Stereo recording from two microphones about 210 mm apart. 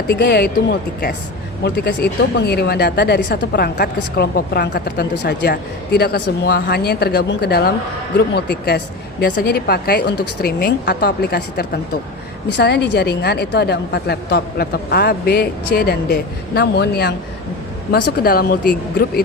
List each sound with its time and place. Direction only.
0.1 s a woman's voice: 50° left (ahead or behind)